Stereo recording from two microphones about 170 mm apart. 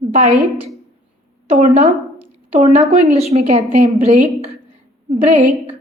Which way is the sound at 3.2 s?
40° right (ahead or behind).